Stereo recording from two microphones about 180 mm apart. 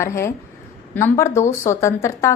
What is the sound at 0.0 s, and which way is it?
A woman's voice, 15° left (ahead or behind).